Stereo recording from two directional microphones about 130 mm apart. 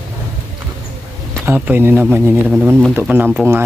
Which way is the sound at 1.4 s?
15° right (ahead or behind).